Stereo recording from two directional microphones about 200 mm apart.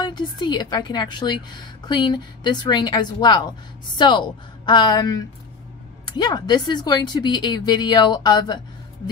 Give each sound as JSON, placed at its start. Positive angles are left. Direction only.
{"t": 0.0, "sound": "a woman's voice", "side_deg": 20}